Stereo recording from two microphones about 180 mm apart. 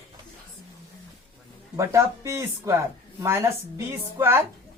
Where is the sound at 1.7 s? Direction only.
15° right (ahead or behind).